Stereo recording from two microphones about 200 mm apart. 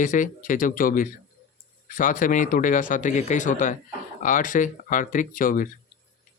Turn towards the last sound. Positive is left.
turn(degrees=45)  # may be behind; listen again after turning